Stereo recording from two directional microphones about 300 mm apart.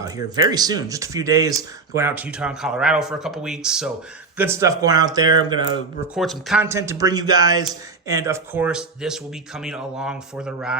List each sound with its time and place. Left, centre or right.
0.4 s speech: centre
6.1 s speech: centre